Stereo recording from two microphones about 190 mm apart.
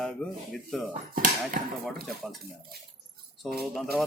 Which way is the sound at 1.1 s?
45° right (ahead or behind).